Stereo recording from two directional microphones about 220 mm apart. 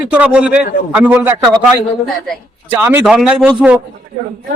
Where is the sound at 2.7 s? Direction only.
10° right (ahead or behind).